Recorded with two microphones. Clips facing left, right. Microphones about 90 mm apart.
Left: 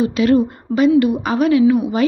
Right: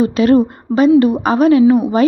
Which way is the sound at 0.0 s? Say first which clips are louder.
Right 3 dB; 40° right (ahead or behind).